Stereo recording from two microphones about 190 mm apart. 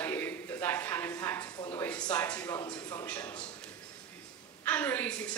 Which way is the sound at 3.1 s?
10° left (ahead or behind).